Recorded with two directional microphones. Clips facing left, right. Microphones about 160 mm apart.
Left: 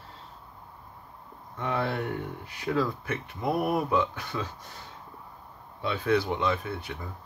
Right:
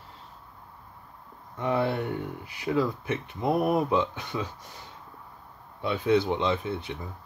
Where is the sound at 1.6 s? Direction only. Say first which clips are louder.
Right 3 dB; 15° right (ahead or behind).